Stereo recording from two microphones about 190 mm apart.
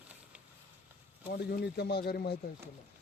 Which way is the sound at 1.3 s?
55° left (ahead or behind).